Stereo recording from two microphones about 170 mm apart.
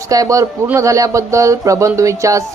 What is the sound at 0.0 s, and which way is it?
A woman's voice, 20° right (ahead or behind).